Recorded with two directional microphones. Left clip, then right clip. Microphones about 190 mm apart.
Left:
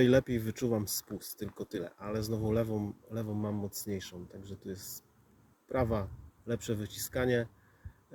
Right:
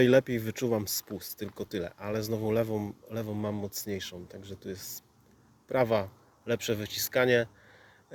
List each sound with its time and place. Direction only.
0.0 s a man's voice: 20° left (ahead or behind)